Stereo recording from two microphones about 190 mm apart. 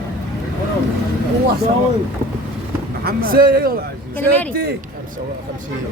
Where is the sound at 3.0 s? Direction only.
50° right (ahead or behind).